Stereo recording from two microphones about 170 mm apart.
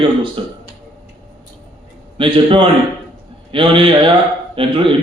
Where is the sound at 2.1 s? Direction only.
30° right (ahead or behind).